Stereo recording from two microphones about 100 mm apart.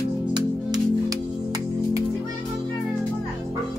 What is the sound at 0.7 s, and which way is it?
Music, 40° right (ahead or behind).